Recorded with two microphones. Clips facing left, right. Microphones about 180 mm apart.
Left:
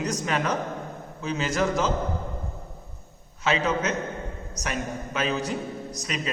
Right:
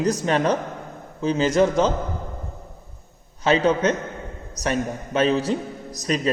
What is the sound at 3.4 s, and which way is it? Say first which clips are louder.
Speech: right 6 dB; 30° right (ahead or behind).